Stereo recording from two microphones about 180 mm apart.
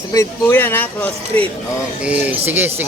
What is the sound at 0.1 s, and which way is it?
Speech, 15° left (ahead or behind).